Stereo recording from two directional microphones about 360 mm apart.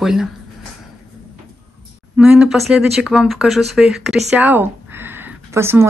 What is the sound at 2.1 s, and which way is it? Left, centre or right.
Speech, centre.